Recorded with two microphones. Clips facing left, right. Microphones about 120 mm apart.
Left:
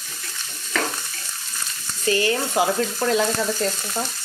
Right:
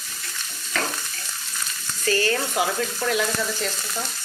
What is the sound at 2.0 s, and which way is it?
Frying, 20° left (ahead or behind).